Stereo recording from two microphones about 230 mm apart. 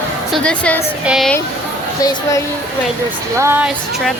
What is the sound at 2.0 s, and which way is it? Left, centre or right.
Speech, centre.